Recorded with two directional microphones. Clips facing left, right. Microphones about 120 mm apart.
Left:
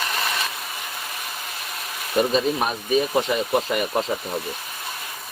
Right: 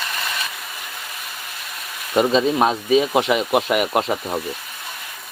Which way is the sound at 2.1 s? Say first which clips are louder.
Right 4 dB; 90° right.